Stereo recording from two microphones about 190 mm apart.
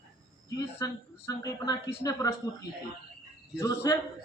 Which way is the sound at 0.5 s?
15° left (ahead or behind).